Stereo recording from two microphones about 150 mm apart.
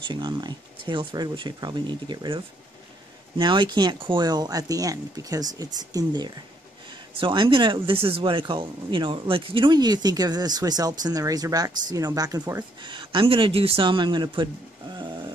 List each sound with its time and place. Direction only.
0.1 s speech: 30° right (ahead or behind)